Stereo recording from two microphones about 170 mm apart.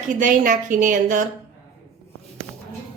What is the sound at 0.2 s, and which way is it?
A woman's voice, 50° right (ahead or behind).